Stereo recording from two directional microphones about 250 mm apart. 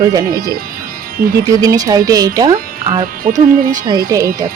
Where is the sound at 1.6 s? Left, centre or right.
Centre.